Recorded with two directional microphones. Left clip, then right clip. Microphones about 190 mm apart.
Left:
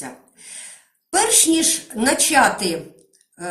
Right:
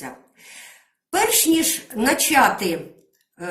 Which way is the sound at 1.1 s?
Centre (ahead or behind).